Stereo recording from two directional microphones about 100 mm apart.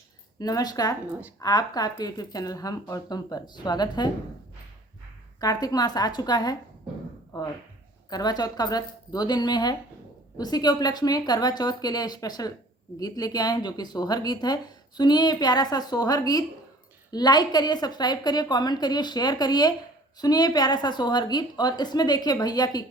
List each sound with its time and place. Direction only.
0.3 s speech: 40° left (ahead or behind)
5.4 s speech: 40° left (ahead or behind)